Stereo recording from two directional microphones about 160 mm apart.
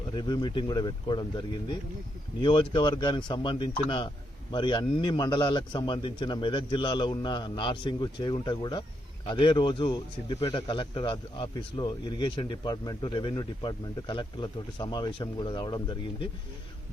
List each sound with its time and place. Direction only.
0.2 s speech: 30° left (ahead or behind)